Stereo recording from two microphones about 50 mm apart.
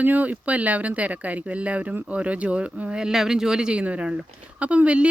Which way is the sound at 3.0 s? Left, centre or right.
Centre.